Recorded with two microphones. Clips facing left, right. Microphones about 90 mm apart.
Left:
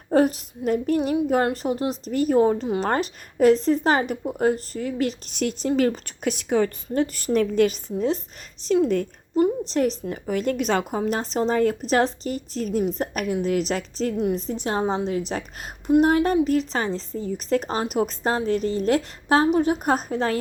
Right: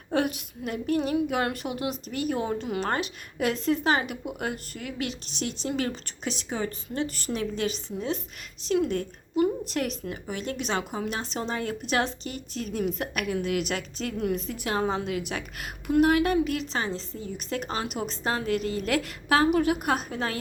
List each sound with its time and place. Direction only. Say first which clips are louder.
0.1 s a woman's voice: left 7 dB; 35° left (ahead or behind)
9.4 s a woman's voice: left 5 dB; 30° left (ahead or behind)
10.2 s a woman's voice: left 9 dB; 50° left (ahead or behind)
14.2 s a woman's voice: left 5 dB; 30° left (ahead or behind)
18.6 s a woman's voice: left 6 dB; 30° left (ahead or behind)